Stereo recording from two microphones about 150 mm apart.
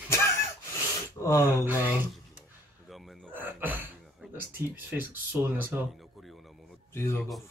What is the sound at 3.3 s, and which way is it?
Gasp, 15° right (ahead or behind).